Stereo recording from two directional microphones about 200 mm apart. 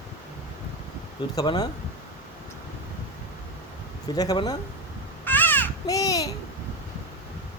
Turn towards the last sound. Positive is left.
turn(degrees=15)  # may be behind; listen again after turning